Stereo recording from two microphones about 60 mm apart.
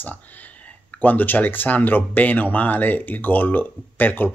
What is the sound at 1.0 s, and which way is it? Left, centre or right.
Speech, left.